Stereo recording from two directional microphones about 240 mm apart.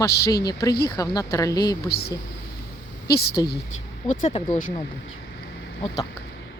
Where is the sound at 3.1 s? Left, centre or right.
Left.